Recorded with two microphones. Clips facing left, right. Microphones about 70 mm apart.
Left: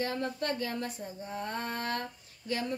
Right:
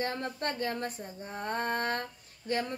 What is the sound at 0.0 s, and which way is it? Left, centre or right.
Female singing, right.